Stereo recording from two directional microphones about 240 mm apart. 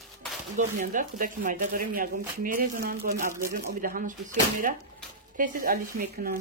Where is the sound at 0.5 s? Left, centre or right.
Right.